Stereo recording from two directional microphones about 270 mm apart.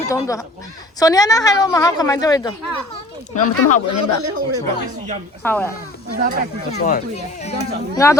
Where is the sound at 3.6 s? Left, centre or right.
Left.